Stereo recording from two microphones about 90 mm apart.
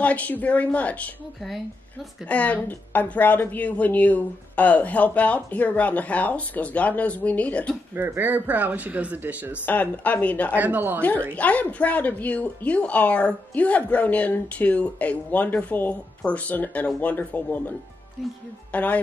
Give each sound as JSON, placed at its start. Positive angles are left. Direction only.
{"t": 0.0, "sound": "a woman's voice", "side_deg": 15}
{"t": 2.2, "sound": "a woman's voice", "side_deg": 15}
{"t": 7.9, "sound": "speech", "side_deg": -25}
{"t": 9.7, "sound": "a woman's voice", "side_deg": 20}
{"t": 10.5, "sound": "speech", "side_deg": -20}
{"t": 11.0, "sound": "a woman's voice", "side_deg": 15}